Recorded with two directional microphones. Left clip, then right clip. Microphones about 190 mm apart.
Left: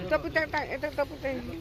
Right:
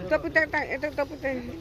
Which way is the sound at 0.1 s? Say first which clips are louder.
Right 4 dB; 20° right (ahead or behind).